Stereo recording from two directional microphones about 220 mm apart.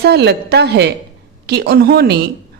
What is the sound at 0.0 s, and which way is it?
A woman's voice, 50° right (ahead or behind).